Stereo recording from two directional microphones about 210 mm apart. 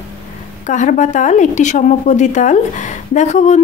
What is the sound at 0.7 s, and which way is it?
A woman's voice, 35° left (ahead or behind).